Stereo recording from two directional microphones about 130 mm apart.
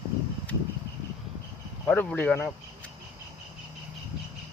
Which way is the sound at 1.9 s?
10° left (ahead or behind).